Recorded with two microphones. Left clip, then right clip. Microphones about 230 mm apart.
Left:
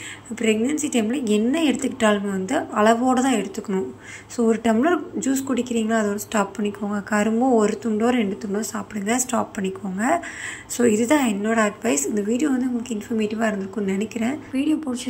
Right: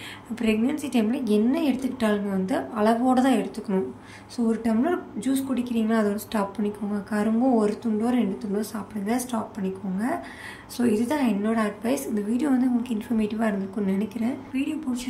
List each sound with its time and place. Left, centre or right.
0.4 s a woman's voice: centre
14.5 s a woman's voice: centre